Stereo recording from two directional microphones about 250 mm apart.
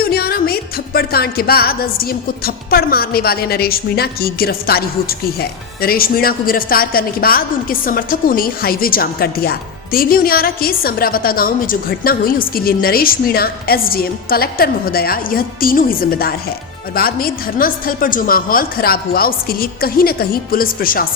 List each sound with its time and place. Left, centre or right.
0.0 s music: left